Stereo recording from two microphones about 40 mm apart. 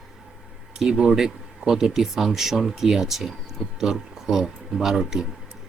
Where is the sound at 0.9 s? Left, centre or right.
Right.